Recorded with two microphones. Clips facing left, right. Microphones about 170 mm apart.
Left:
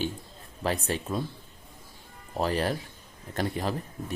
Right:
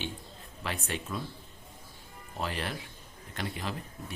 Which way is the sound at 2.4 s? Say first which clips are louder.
Left 8 dB; 40° left (ahead or behind).